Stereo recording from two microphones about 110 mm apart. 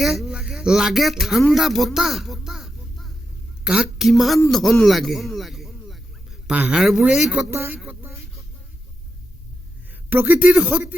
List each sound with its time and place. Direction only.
0.0 s a woman's voice: 5° right (ahead or behind)
4.5 s a sound: 5° left (ahead or behind)
6.6 s speech: 10° right (ahead or behind)
7.5 s speech: 20° right (ahead or behind)
9.9 s speech: 15° right (ahead or behind)